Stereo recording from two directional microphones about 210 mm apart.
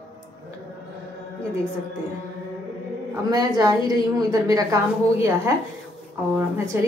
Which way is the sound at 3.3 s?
15° right (ahead or behind).